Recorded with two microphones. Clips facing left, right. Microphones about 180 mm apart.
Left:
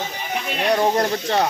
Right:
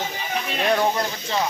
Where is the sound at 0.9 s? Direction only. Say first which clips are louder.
Left 5 dB; 55° left (ahead or behind).